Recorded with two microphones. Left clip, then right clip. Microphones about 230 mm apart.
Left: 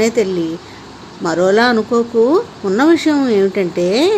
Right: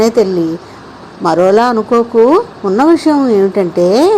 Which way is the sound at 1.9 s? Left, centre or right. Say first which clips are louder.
Right 5 dB; centre.